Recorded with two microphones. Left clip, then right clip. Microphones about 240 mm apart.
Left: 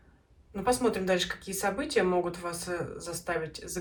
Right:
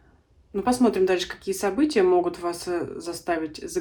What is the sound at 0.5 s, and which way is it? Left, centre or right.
Speech, right.